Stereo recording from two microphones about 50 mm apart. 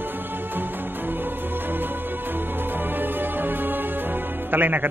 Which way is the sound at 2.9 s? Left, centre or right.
Right.